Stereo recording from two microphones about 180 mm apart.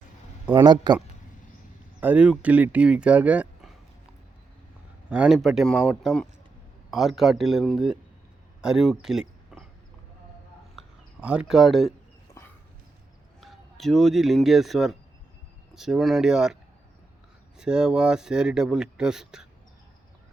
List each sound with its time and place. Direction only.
0.5 s speech: 25° right (ahead or behind)
2.0 s speech: 10° right (ahead or behind)
5.0 s speech: 5° right (ahead or behind)
10.8 s a sound: 10° right (ahead or behind)
13.4 s speech: centre (ahead or behind)
17.6 s speech: 5° right (ahead or behind)